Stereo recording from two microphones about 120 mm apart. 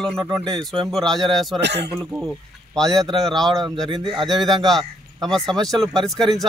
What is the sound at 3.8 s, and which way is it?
Speech, 40° right (ahead or behind).